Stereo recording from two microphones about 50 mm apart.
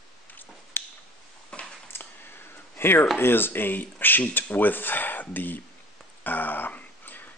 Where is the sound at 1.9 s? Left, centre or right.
Left.